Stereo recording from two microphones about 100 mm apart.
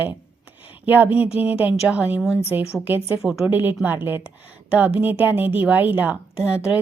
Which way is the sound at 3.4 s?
20° right (ahead or behind).